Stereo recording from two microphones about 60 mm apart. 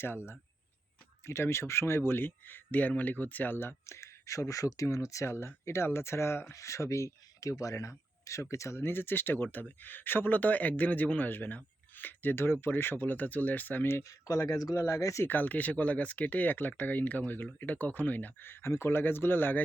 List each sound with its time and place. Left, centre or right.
0.0 s speech: left
3.8 s speech: left
8.8 s speech: left
14.0 s speech: left
14.5 s speech: left
15.3 s speech: left